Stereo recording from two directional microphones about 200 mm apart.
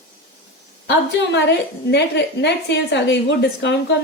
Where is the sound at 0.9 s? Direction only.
60° left (ahead or behind).